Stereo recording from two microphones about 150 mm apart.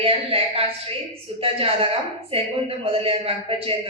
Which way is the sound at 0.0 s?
40° right (ahead or behind).